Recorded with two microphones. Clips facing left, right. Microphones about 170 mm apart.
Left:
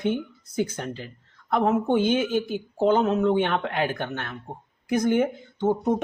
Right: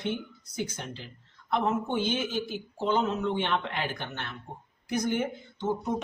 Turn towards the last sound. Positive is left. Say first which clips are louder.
# left 7 dB
turn(degrees=55)  # may be behind; listen again after turning